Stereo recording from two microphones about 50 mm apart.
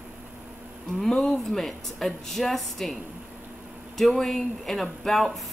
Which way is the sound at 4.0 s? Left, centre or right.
Centre.